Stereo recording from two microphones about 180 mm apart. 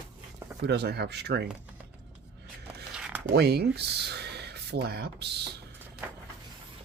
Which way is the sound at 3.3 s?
65° right (ahead or behind).